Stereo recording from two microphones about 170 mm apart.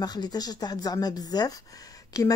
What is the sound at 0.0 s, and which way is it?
Speech, 25° left (ahead or behind).